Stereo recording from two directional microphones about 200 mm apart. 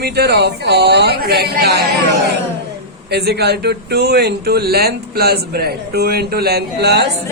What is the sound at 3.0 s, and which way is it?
A man's voice, 55° right (ahead or behind).